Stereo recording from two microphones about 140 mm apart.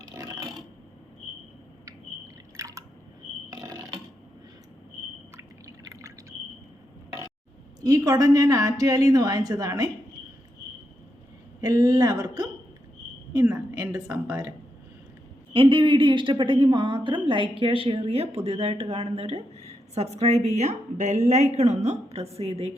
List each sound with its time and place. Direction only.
0.2 s a sound: 25° right (ahead or behind)
1.8 s drip: 25° right (ahead or behind)
3.5 s mechanisms: 25° right (ahead or behind)
5.4 s a sound: 20° right (ahead or behind)
7.8 s a woman's voice: 25° right (ahead or behind)
11.6 s a woman's voice: 25° right (ahead or behind)
13.3 s a sound: 20° right (ahead or behind)
13.7 s speech: 25° right (ahead or behind)
15.5 s a woman's voice: 40° right (ahead or behind)